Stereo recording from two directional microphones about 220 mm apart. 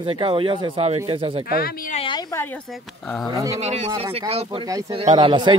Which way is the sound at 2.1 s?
20° left (ahead or behind).